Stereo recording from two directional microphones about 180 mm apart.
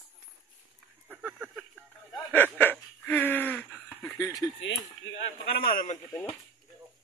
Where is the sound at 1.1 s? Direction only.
5° right (ahead or behind).